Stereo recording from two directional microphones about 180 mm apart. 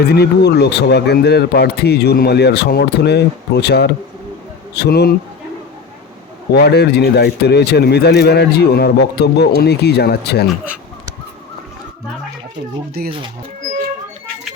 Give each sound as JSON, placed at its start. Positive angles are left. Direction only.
{"t": 0.1, "sound": "a man's voice", "side_deg": 65}
{"t": 6.5, "sound": "a man's voice", "side_deg": 65}
{"t": 13.1, "sound": "speech", "side_deg": -30}